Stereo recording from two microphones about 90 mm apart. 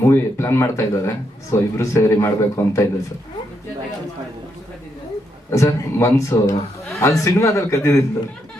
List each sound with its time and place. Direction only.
0.0 s a man's voice: 30° left (ahead or behind)
5.5 s a man's voice: 30° left (ahead or behind)